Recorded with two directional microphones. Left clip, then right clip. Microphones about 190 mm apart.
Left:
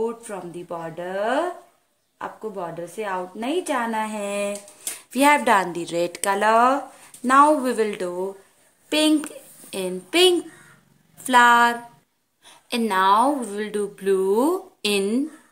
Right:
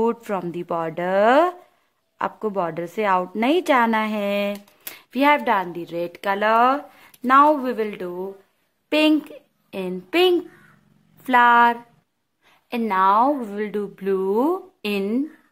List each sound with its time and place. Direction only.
0.0 s a woman's voice: 25° right (ahead or behind)
8.9 s a woman's voice: 25° right (ahead or behind)